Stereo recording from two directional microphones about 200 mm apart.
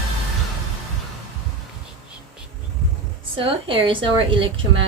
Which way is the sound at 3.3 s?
25° right (ahead or behind).